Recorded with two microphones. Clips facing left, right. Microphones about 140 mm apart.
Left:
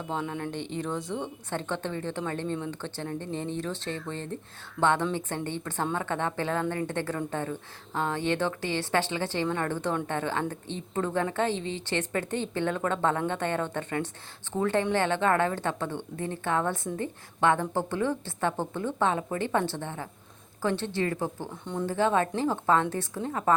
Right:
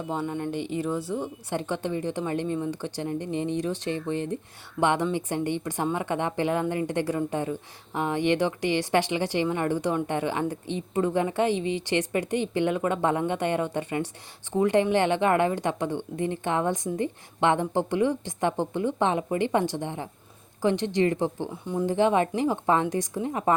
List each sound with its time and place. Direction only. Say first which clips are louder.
0.1 s a woman's voice: right 3 dB; 5° right (ahead or behind)
21.5 s a woman's voice: right 4 dB; 5° right (ahead or behind)
21.8 s a woman's voice: right 3 dB; 20° right (ahead or behind)